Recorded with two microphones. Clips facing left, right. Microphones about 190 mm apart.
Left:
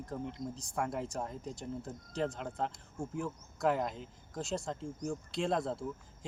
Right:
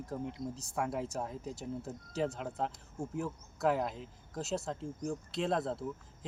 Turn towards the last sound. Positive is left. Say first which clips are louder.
# even
turn(degrees=0)  # may be behind; listen again after turning